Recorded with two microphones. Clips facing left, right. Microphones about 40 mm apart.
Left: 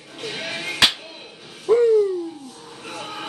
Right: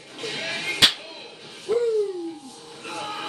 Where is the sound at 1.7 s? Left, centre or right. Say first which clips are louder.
Left 7 dB; left.